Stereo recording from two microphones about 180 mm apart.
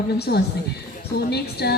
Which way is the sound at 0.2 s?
65° left (ahead or behind).